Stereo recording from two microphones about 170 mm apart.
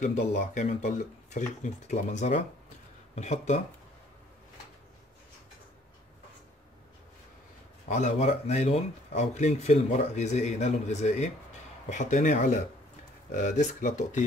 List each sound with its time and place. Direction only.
0.0 s speech: 45° left (ahead or behind)
7.9 s speech: 45° left (ahead or behind)